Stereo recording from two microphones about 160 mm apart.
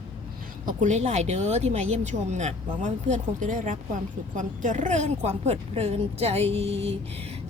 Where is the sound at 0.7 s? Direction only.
50° right (ahead or behind).